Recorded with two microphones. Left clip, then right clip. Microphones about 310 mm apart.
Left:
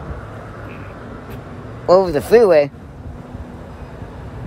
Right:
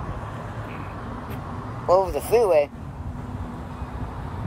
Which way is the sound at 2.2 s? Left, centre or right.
Left.